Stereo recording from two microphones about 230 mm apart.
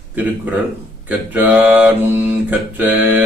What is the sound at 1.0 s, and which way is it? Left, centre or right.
Mantra, centre.